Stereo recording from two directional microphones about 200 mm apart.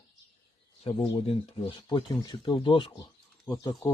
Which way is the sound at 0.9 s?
25° left (ahead or behind).